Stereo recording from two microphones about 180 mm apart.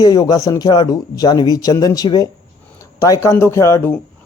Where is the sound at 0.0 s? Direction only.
20° left (ahead or behind).